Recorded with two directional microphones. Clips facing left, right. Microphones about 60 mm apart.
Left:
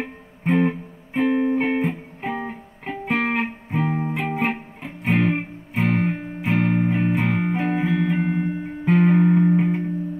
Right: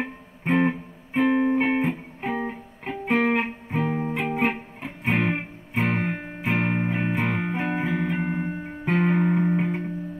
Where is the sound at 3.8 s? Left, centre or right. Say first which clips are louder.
Left 2 dB; centre.